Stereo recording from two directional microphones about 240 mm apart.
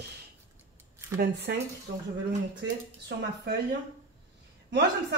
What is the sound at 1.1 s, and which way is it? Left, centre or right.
Speech, right.